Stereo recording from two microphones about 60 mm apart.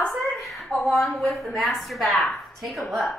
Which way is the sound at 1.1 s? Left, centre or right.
Centre.